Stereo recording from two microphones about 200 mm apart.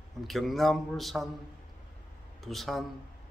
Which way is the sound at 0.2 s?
Centre (ahead or behind).